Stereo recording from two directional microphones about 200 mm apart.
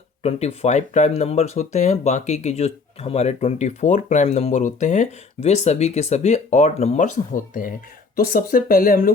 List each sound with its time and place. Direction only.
0.2 s speech: 30° left (ahead or behind)